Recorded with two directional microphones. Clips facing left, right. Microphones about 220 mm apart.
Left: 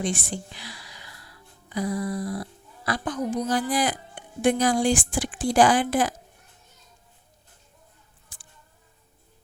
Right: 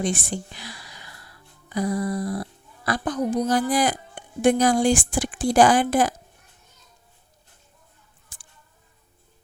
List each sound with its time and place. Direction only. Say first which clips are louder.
0.0 s a woman's voice: right 3 dB; 45° right (ahead or behind)